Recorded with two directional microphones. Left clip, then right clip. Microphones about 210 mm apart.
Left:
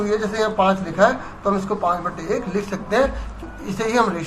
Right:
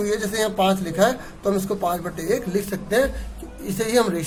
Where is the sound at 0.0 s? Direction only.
55° right (ahead or behind).